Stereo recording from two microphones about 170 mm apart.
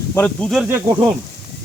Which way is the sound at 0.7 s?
15° right (ahead or behind).